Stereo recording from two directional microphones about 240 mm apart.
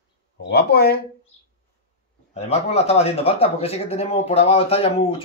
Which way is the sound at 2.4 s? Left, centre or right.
Left.